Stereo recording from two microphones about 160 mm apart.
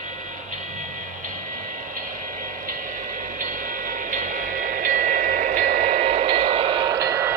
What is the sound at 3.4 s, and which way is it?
Music, 55° right (ahead or behind).